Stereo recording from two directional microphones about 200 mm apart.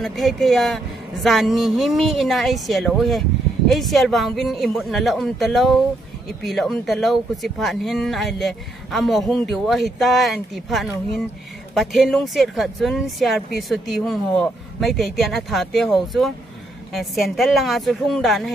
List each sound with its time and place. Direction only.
0.0 s speech: centre (ahead or behind)